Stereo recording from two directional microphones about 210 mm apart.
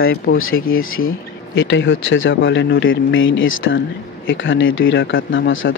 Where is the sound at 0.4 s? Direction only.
75° left (ahead or behind).